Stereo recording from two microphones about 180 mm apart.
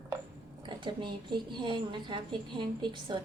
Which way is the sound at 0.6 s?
25° right (ahead or behind).